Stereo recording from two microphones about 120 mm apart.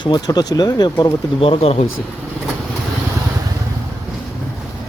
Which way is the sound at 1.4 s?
55° left (ahead or behind).